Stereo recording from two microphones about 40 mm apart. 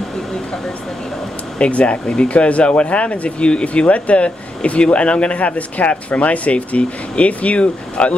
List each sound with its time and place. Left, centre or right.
1.6 s speech: left
2.0 s speech: left